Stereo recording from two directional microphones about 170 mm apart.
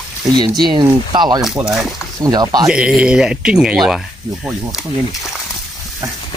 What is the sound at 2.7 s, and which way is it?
Speech, 5° right (ahead or behind).